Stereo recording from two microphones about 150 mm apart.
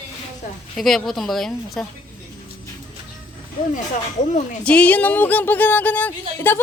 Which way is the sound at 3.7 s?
55° left (ahead or behind).